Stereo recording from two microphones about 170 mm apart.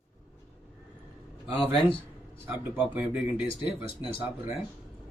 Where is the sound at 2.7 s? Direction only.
10° right (ahead or behind).